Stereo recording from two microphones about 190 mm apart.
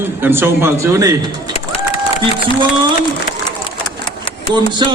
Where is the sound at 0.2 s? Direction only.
10° right (ahead or behind).